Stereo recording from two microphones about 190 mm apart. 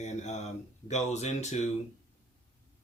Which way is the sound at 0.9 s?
35° left (ahead or behind).